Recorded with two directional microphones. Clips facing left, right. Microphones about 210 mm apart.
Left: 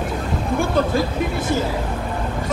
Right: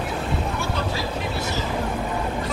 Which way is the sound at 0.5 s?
50° left (ahead or behind).